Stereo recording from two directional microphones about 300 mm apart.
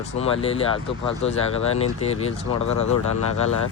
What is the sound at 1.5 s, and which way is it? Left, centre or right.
Speech, left.